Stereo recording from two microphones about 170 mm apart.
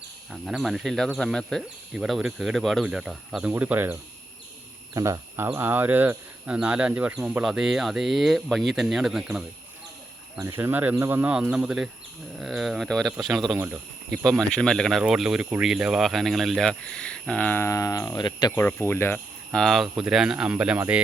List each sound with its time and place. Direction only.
0.3 s speech: centre (ahead or behind)
4.9 s speech: 20° right (ahead or behind); by 9.4 s 5° right (ahead or behind)
10.3 s speech: 15° right (ahead or behind); by 13.6 s centre (ahead or behind)
13.6 s speech: 10° right (ahead or behind)
14.5 s speech: 5° left (ahead or behind); by 18.6 s 25° left (ahead or behind)
18.6 s speech: 15° left (ahead or behind)
19.5 s speech: centre (ahead or behind)